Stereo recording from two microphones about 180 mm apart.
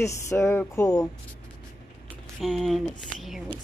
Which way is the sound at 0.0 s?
15° left (ahead or behind).